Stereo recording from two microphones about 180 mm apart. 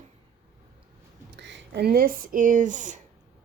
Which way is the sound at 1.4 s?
75° right (ahead or behind).